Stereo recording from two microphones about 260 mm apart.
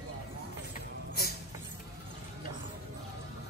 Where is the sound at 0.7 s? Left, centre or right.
Left.